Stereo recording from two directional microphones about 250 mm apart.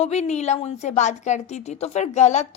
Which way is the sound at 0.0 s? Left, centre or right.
Left.